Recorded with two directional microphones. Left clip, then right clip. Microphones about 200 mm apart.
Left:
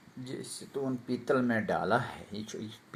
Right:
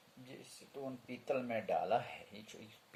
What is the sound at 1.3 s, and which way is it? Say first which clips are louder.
Speech: left 7 dB; 30° left (ahead or behind).